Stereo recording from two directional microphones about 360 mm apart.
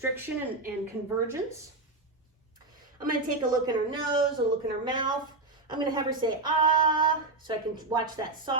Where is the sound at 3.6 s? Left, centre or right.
Centre.